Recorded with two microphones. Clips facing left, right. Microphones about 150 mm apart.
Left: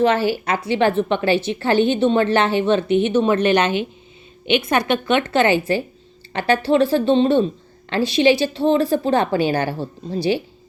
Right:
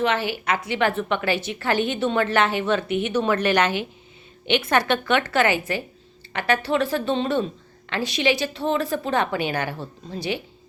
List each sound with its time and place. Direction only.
0.0 s a woman's voice: 35° left (ahead or behind)